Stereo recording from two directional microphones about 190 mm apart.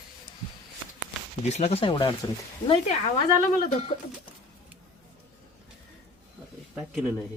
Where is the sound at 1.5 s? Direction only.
35° left (ahead or behind).